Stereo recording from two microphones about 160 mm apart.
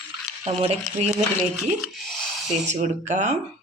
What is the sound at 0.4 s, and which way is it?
Speech, 40° right (ahead or behind).